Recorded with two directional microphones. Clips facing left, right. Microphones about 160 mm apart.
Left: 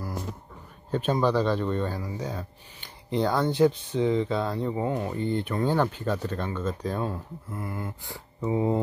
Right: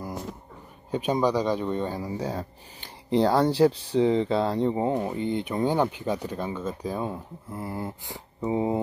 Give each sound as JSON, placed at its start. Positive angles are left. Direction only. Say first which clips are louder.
{"t": 0.9, "sound": "speech", "louder": "even", "side_deg": -15}
{"t": 7.5, "sound": "speech", "louder": "right 2 dB", "side_deg": -30}